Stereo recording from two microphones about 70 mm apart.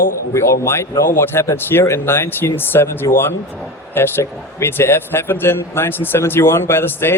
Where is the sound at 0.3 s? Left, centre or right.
Left.